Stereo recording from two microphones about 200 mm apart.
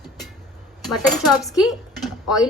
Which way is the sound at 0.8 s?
Centre (ahead or behind).